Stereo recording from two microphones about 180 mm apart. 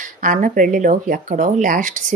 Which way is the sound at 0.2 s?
50° right (ahead or behind).